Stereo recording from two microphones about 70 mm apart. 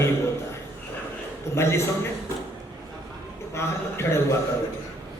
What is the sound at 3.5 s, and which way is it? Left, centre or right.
Speech, left.